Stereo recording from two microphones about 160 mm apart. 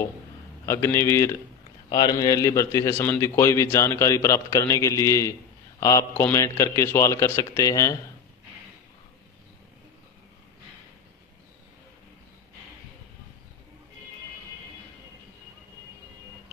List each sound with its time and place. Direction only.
0.7 s a man's voice: 15° left (ahead or behind)